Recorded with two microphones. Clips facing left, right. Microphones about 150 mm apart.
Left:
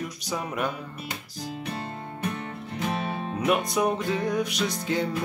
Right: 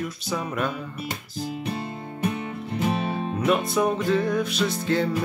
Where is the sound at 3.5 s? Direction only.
15° left (ahead or behind).